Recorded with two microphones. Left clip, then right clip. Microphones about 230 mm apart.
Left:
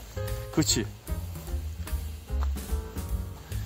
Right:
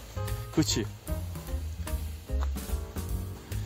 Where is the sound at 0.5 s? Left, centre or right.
Centre.